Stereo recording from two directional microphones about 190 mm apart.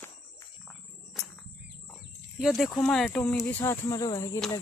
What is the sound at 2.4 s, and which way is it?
Speech, centre (ahead or behind).